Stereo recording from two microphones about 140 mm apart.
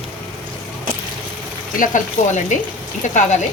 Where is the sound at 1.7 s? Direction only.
65° left (ahead or behind).